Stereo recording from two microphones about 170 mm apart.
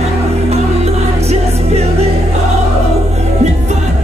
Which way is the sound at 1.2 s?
40° right (ahead or behind).